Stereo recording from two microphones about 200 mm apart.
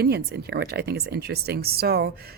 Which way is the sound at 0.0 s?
55° right (ahead or behind).